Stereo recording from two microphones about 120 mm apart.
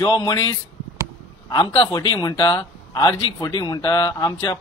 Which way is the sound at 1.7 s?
40° left (ahead or behind).